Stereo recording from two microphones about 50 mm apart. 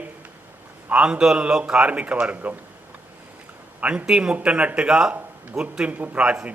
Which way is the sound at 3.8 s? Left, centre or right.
Right.